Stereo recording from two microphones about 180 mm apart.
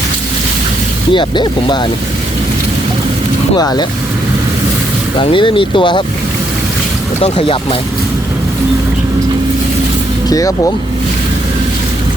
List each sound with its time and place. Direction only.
1.1 s speech: 25° left (ahead or behind)
3.6 s speech: 20° left (ahead or behind)
5.2 s speech: 30° left (ahead or behind)
7.2 s speech: 30° left (ahead or behind)
10.2 s speech: 20° left (ahead or behind)